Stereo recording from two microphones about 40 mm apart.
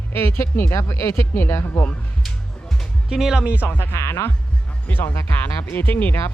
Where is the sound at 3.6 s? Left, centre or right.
Left.